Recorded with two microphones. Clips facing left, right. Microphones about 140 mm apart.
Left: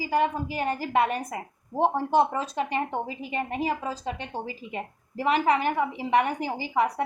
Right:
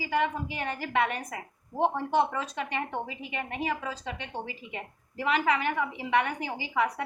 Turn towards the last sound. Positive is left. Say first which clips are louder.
# left 3 dB
turn(degrees=35)  # may be behind; listen again after turning